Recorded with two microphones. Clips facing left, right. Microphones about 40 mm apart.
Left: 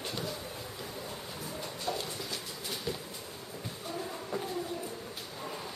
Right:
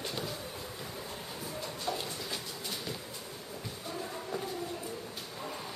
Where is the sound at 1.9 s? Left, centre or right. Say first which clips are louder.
Left 1 dB; centre.